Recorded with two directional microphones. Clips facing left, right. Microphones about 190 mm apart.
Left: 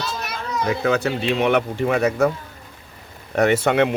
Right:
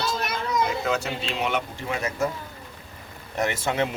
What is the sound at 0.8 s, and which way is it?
Speech, 60° left (ahead or behind).